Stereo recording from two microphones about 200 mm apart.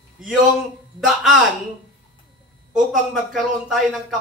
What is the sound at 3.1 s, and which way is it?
Speech, centre (ahead or behind).